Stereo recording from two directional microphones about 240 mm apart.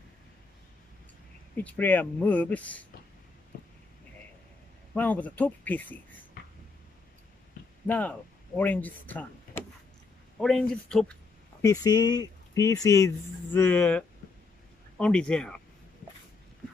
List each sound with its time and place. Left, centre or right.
1.6 s speech: centre
3.5 s a sound: left
4.9 s speech: centre
7.8 s speech: centre
11.6 s speech: centre